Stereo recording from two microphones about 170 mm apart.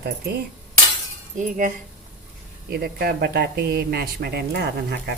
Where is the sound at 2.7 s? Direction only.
65° right (ahead or behind).